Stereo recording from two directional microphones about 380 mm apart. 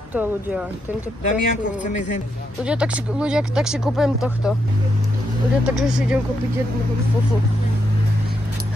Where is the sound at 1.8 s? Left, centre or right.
Centre.